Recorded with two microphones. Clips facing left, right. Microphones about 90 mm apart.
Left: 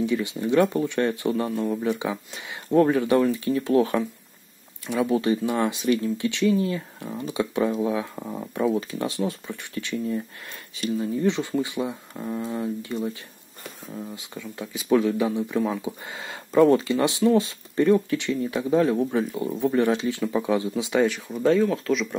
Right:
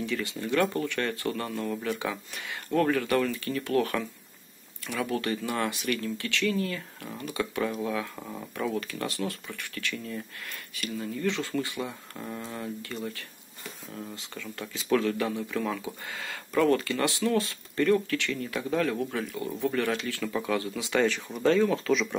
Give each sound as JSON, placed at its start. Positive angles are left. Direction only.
{"t": 0.0, "sound": "speech", "side_deg": 20}
{"t": 21.4, "sound": "speech", "side_deg": 5}